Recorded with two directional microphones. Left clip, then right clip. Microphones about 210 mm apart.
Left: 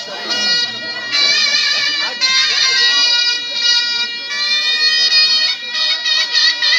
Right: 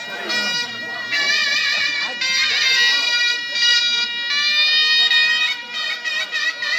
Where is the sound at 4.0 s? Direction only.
40° left (ahead or behind).